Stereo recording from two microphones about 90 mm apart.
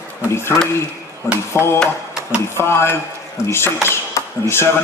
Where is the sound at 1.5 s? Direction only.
30° left (ahead or behind).